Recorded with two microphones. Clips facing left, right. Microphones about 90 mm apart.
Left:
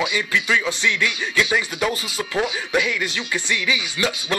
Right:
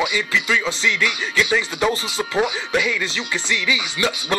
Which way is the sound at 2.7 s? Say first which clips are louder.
Left 1 dB; 10° left (ahead or behind).